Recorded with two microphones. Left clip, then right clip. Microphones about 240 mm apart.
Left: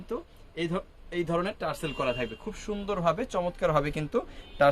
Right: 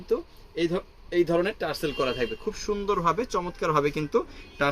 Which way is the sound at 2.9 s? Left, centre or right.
Left.